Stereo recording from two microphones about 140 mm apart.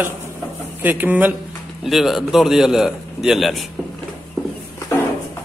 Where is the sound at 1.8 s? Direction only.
Centre (ahead or behind).